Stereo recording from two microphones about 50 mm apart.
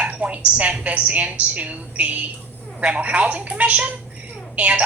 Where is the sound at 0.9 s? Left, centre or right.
Right.